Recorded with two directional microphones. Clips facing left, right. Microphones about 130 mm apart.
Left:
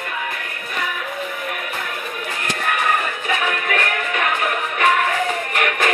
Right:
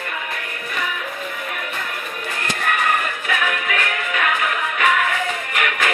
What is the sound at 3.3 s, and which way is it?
Music, 35° left (ahead or behind).